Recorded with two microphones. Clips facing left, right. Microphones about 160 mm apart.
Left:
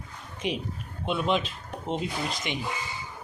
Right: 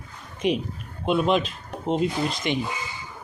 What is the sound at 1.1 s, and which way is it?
Speech, 50° right (ahead or behind).